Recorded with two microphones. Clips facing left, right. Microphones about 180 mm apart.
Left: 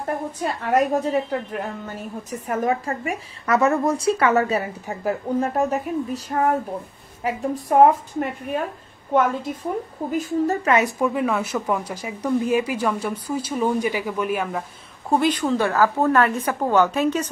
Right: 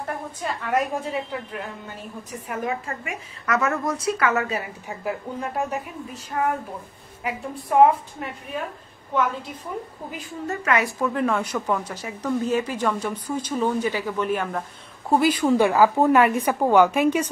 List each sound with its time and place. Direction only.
0.0 s a woman's voice: 40° left (ahead or behind)
10.1 s a woman's voice: 35° left (ahead or behind)
11.0 s speech: 10° left (ahead or behind)
15.0 s a woman's voice: 5° right (ahead or behind)